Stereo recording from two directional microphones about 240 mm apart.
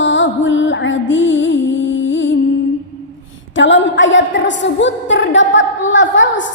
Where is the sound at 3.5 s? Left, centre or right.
Left.